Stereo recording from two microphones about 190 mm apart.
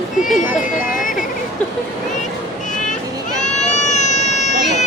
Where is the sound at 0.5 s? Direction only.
45° left (ahead or behind).